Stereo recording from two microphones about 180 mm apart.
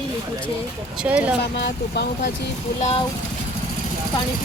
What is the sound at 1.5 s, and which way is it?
Speech, 70° left (ahead or behind).